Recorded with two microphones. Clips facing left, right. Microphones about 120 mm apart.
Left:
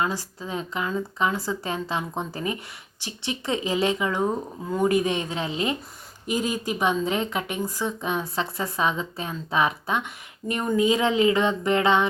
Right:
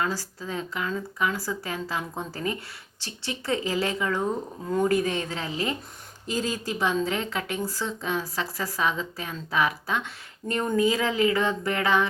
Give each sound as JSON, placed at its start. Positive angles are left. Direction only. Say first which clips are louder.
{"t": 0.0, "sound": "a woman's voice", "louder": "left 2 dB", "side_deg": 20}